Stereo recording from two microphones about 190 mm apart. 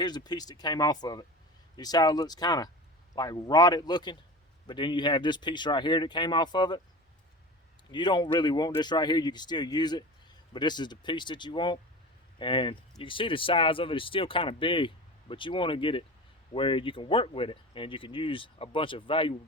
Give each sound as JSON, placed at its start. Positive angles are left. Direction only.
{"t": 0.0, "sound": "speech", "side_deg": 20}
{"t": 7.9, "sound": "speech", "side_deg": 25}